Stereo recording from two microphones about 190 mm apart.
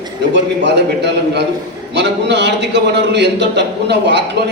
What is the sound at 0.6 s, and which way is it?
A man's voice, 65° right (ahead or behind).